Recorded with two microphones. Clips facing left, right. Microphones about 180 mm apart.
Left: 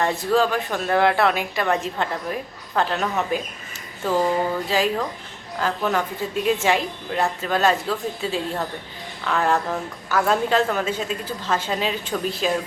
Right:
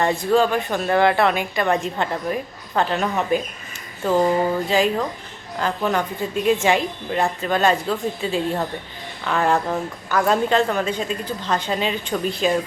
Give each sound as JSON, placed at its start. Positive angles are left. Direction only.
{"t": 0.0, "sound": "a woman's voice", "side_deg": 0}
{"t": 4.1, "sound": "speech", "side_deg": -15}
{"t": 4.7, "sound": "a woman's voice", "side_deg": 0}